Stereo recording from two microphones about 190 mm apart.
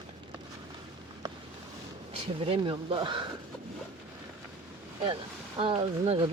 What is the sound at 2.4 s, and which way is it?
Speech, 30° right (ahead or behind).